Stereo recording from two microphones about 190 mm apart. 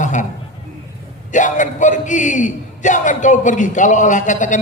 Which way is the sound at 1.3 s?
40° left (ahead or behind).